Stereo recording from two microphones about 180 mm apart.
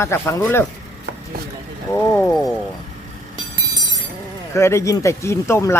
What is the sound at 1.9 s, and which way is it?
Speech, 15° left (ahead or behind).